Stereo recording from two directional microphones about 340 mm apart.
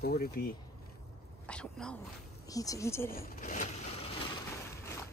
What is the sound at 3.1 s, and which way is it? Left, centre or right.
Speech, left.